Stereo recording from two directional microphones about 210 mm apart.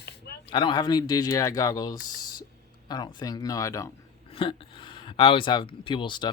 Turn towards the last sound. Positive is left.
turn(degrees=20)  # may be behind; listen again after turning